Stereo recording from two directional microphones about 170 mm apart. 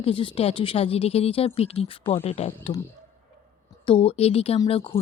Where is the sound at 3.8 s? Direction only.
30° left (ahead or behind).